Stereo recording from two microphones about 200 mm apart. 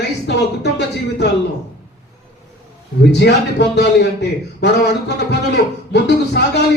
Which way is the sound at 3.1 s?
55° left (ahead or behind).